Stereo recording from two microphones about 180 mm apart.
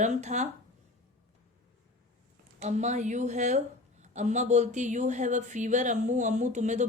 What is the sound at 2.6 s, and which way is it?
Speech, 40° right (ahead or behind).